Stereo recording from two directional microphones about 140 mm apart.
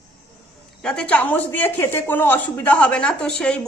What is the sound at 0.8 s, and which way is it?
Speech, 5° left (ahead or behind).